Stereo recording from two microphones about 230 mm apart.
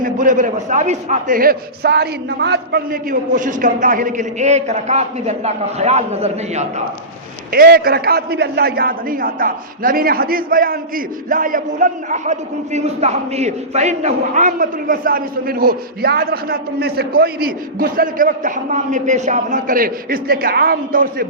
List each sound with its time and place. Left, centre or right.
0.0 s a man's voice: right
7.5 s a man's voice: right